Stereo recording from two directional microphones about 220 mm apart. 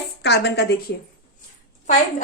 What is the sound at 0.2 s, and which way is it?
Speech, 50° left (ahead or behind).